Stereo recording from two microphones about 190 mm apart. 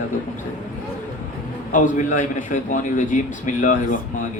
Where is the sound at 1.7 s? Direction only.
40° left (ahead or behind).